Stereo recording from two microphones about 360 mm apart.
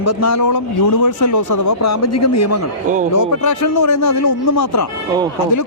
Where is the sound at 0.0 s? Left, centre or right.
Left.